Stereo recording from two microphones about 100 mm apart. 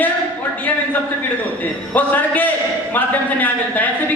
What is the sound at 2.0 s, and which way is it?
A man's voice, 15° left (ahead or behind).